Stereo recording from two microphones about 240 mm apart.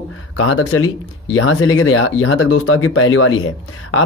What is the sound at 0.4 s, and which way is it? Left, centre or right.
Speech, left.